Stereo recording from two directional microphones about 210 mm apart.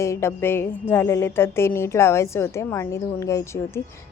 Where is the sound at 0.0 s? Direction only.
15° left (ahead or behind).